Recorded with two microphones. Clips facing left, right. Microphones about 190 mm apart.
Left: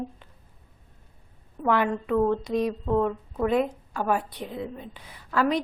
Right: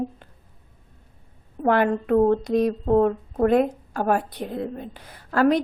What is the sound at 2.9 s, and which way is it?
Speech, 40° right (ahead or behind).